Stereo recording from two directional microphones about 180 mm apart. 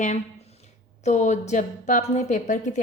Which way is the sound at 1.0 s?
40° left (ahead or behind).